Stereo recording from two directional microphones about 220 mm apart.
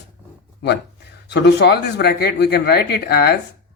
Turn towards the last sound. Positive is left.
turn(degrees=45)  # may be behind; listen again after turning